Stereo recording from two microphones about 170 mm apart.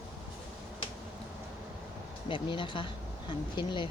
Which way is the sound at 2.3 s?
30° left (ahead or behind).